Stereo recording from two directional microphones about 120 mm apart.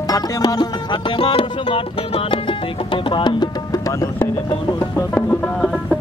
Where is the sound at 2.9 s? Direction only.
40° left (ahead or behind).